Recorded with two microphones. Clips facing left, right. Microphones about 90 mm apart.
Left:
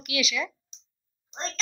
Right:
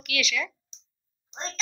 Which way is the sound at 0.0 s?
15° left (ahead or behind).